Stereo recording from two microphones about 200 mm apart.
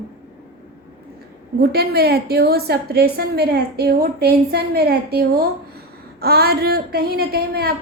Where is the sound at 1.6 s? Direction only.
55° right (ahead or behind).